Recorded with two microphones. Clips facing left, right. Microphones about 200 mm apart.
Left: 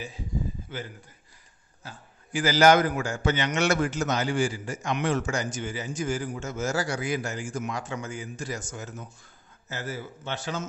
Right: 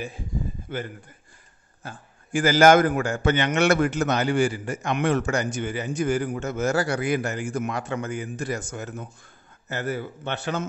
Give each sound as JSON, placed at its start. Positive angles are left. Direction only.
{"t": 0.7, "sound": "a man's voice", "side_deg": -55}